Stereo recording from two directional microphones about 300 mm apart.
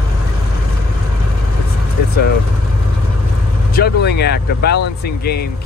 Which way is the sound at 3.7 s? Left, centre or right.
Left.